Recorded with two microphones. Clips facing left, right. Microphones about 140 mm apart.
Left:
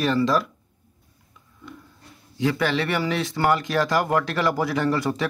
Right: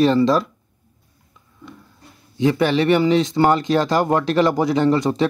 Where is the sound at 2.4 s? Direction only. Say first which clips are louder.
Right 6 dB; 25° right (ahead or behind).